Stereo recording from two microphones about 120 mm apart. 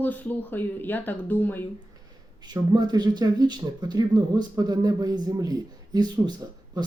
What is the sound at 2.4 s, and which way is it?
Speech, 35° right (ahead or behind).